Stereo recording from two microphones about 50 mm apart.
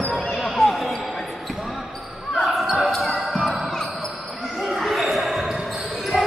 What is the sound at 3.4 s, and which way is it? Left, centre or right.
Basketball bounce, centre.